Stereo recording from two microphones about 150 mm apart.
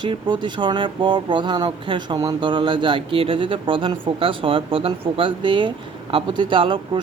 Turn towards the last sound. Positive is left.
turn(degrees=-35)  # may be behind; listen again after turning